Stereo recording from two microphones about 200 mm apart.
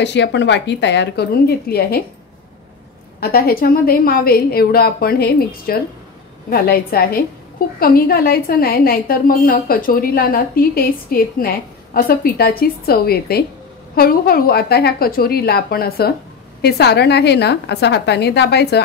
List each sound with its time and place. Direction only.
0.0 s a woman's voice: 60° left (ahead or behind)
3.2 s a woman's voice: 50° left (ahead or behind)